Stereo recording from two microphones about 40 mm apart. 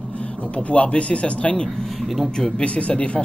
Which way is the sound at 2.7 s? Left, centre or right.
Left.